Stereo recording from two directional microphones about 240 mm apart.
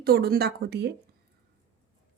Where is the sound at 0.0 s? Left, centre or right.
Right.